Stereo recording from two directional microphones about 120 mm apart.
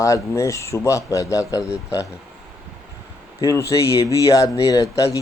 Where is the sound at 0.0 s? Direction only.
25° left (ahead or behind).